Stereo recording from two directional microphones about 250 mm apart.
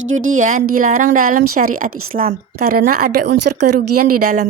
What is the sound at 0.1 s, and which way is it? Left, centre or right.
Speech, right.